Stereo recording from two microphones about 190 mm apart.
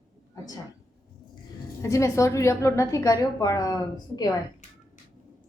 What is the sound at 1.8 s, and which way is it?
A woman's voice, 15° left (ahead or behind).